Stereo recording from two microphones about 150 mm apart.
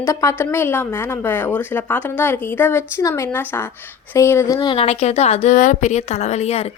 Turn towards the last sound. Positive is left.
turn(degrees=45)  # may be behind; listen again after turning